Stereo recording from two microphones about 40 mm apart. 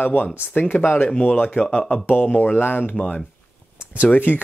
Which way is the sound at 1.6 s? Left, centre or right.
Centre.